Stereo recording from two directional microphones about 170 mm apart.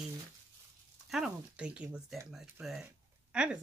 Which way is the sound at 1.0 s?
Centre (ahead or behind).